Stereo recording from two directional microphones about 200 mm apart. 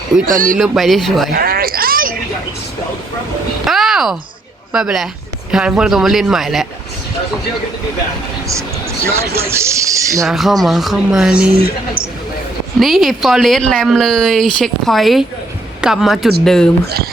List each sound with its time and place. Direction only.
0.3 s speech: 45° right (ahead or behind)
0.6 s speech: centre (ahead or behind)
1.3 s speech: 50° right (ahead or behind)
3.7 s a sound: centre (ahead or behind)
4.7 s speech: 5° right (ahead or behind)
9.4 s speech: 15° right (ahead or behind)
10.2 s speech: centre (ahead or behind)
12.8 s speech: centre (ahead or behind)